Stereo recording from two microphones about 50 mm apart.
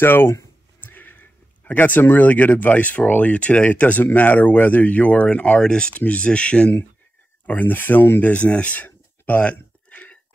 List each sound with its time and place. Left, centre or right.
0.0 s a sound: left
3.1 s speech: left
7.4 s speech: left
8.2 s speech: left
8.7 s whispering: left